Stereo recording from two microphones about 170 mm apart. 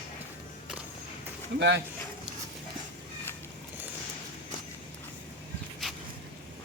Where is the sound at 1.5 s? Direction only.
90° right.